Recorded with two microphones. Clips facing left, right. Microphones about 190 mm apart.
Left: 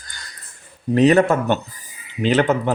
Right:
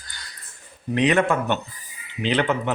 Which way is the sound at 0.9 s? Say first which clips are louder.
Left 6 dB; 40° left (ahead or behind).